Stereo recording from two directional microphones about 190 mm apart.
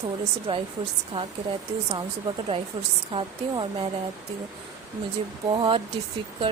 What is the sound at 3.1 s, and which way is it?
Speech, 25° right (ahead or behind).